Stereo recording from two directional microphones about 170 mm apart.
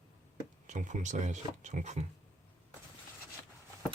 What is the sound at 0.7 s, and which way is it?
Speech, 45° right (ahead or behind).